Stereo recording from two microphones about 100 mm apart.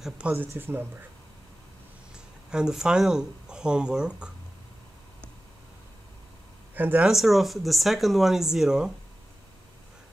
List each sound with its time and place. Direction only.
0.3 s speech: 20° right (ahead or behind)
2.1 s speech: 10° right (ahead or behind)
6.7 s speech: 20° right (ahead or behind)
7.1 s speech: centre (ahead or behind)